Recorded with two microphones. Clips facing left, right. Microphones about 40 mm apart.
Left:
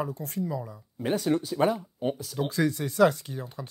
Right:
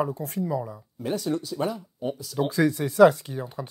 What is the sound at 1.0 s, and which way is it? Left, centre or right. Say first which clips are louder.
Speech: left 2 dB; left.